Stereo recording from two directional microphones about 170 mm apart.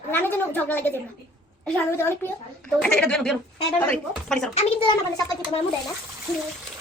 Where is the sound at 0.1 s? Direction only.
10° left (ahead or behind).